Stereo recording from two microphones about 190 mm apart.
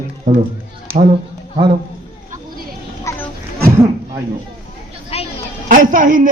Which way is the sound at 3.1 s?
15° left (ahead or behind).